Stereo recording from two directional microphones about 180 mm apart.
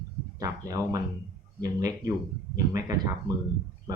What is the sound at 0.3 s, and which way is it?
Speech, 20° right (ahead or behind).